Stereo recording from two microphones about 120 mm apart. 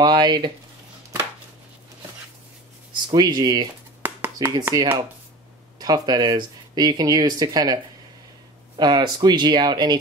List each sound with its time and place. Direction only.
0.0 s speech: 35° right (ahead or behind)
3.2 s speech: 35° right (ahead or behind)
4.0 s a sound: 15° right (ahead or behind)
4.4 s speech: 30° right (ahead or behind)